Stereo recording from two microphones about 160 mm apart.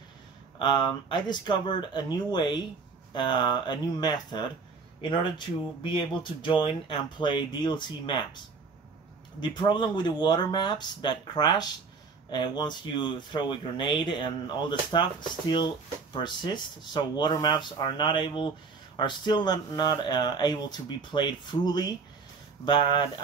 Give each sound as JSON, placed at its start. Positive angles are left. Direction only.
{"t": 0.6, "sound": "speech", "side_deg": 30}
{"t": 5.8, "sound": "speech", "side_deg": 30}
{"t": 9.6, "sound": "speech", "side_deg": 30}